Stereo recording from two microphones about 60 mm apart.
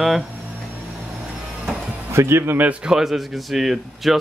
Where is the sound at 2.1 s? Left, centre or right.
Right.